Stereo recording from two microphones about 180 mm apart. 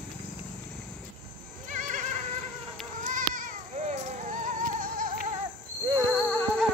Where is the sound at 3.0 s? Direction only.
45° right (ahead or behind).